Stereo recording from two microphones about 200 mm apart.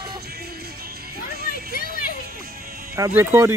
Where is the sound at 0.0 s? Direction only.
50° right (ahead or behind).